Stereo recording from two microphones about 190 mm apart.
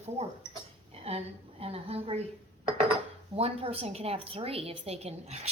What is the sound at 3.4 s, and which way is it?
A woman's voice, 30° right (ahead or behind).